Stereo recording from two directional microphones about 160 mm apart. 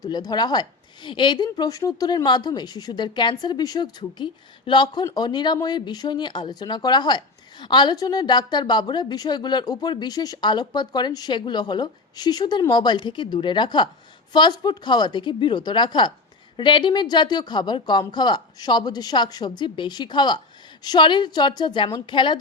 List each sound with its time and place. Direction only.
0.0 s a woman's voice: 25° left (ahead or behind)